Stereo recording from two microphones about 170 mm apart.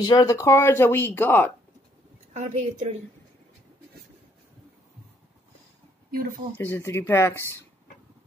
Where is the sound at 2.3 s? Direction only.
45° right (ahead or behind).